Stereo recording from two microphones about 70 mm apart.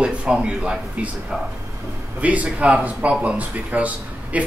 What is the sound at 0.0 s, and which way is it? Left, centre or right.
Speech, centre.